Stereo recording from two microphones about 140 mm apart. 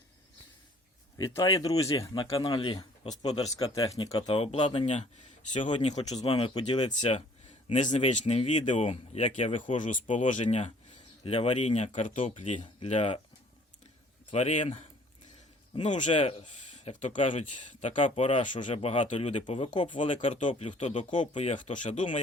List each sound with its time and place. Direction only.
1.2 s speech: 25° left (ahead or behind)
2.3 s speech: 35° left (ahead or behind)
3.2 s speech: 50° left (ahead or behind)
3.6 s speech: 25° left (ahead or behind)
3.9 s speech: 45° left (ahead or behind)
7.7 s speech: 55° left (ahead or behind)
8.8 s speech: 40° left (ahead or behind)
9.3 s speech: 55° left (ahead or behind)
11.2 s speech: 45° left (ahead or behind); by 12.6 s 60° left (ahead or behind)
12.8 s speech: 50° left (ahead or behind)
14.3 s speech: 55° left (ahead or behind)
18.0 s speech: 45° left (ahead or behind)
18.7 s speech: 45° left (ahead or behind)
20.3 s speech: 60° left (ahead or behind)